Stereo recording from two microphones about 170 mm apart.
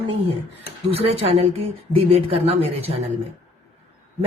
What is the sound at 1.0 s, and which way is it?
Speech, 35° right (ahead or behind).